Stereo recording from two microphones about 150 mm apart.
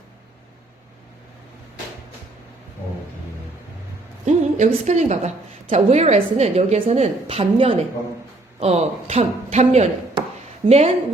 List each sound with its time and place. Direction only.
4.3 s a woman's voice: 50° right (ahead or behind)